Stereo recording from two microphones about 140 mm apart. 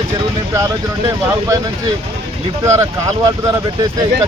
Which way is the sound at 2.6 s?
20° right (ahead or behind).